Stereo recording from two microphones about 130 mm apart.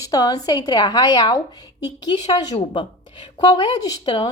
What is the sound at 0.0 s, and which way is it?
A woman's voice, 30° left (ahead or behind).